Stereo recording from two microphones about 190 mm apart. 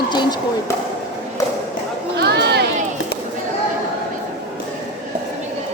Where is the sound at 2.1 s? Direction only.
60° right (ahead or behind).